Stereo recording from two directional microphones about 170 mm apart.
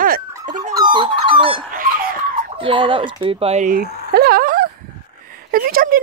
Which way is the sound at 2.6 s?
30° right (ahead or behind).